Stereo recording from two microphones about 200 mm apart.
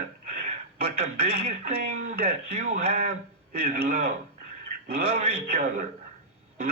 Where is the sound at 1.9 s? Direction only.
45° right (ahead or behind).